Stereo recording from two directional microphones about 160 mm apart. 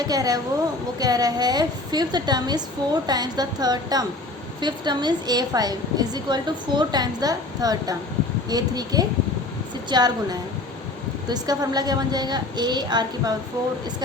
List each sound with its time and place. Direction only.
0.0 s a woman's voice: 25° right (ahead or behind)